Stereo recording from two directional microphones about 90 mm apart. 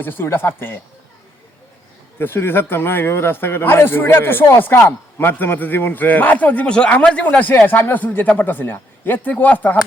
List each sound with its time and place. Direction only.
0.0 s speech: 25° left (ahead or behind)
2.1 s speech: 25° left (ahead or behind)